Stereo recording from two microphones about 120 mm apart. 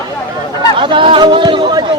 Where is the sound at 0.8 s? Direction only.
45° right (ahead or behind).